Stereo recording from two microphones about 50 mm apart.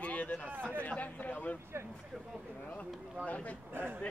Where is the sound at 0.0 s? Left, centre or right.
Left.